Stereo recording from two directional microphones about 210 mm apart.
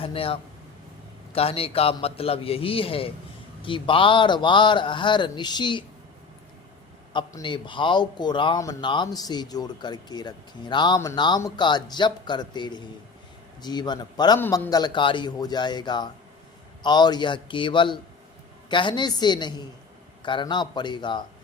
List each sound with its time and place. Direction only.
0.0 s speech: 25° left (ahead or behind)
7.1 s speech: 20° left (ahead or behind)